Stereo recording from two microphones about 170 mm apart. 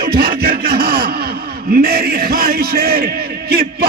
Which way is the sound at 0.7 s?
65° right (ahead or behind).